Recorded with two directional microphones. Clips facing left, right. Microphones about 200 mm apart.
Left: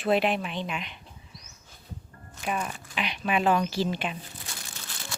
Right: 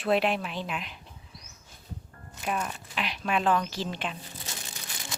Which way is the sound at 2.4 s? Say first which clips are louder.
Even; 5° left (ahead or behind).